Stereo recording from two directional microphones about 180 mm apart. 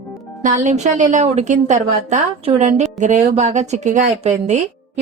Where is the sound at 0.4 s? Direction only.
40° right (ahead or behind).